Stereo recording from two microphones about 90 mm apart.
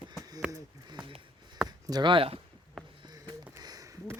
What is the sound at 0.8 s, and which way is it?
Speech, 55° right (ahead or behind).